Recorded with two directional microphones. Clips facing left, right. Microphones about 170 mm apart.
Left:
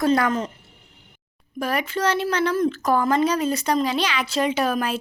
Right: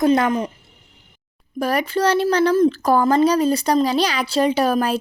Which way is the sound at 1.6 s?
35° right (ahead or behind).